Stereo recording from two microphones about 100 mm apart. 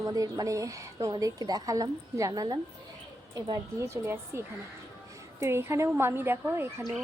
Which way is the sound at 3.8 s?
25° right (ahead or behind).